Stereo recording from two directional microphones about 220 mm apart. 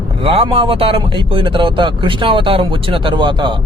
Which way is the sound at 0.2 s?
25° right (ahead or behind).